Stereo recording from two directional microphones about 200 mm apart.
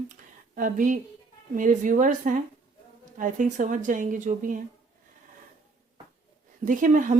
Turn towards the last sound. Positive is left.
turn(degrees=-40)  # may be behind; listen again after turning